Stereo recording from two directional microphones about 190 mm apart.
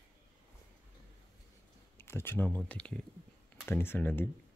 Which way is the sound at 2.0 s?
10° left (ahead or behind).